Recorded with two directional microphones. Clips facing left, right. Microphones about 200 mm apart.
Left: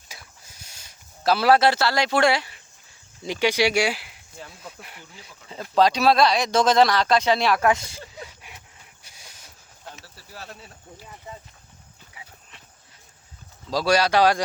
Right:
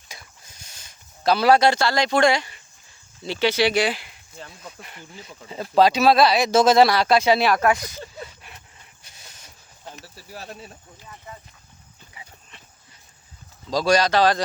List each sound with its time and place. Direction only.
0.1 s a sound: 5° left (ahead or behind)
3.2 s speech: 10° left (ahead or behind)
5.7 s speech: 5° right (ahead or behind)
8.2 s vehicle: 10° left (ahead or behind)
9.0 s train: 10° left (ahead or behind)
10.0 s a sound: 15° right (ahead or behind)
12.1 s horse: 5° left (ahead or behind)
13.7 s speech: 5° left (ahead or behind)